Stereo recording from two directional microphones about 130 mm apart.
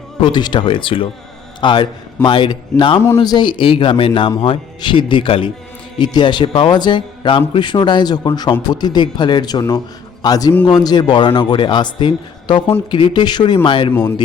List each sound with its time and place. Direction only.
0.2 s a man's voice: 35° left (ahead or behind)